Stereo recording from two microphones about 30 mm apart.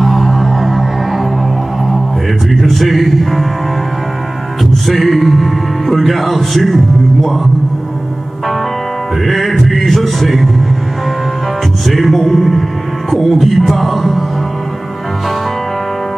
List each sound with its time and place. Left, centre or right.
0.0 s music: centre
2.5 s speech: centre
4.8 s speech: centre
9.2 s music: centre
11.8 s music: centre